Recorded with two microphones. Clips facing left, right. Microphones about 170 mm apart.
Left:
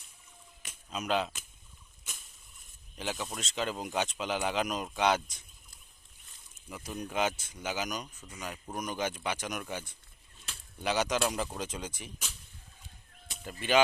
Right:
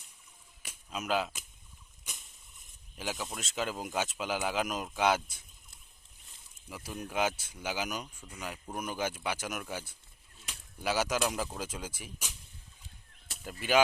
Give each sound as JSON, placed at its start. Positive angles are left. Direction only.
{"t": 0.6, "sound": "a sound", "side_deg": -5}
{"t": 3.0, "sound": "speech", "side_deg": -5}
{"t": 6.7, "sound": "speech", "side_deg": -5}